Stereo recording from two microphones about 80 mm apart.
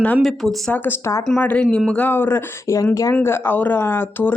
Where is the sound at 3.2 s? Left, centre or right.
Left.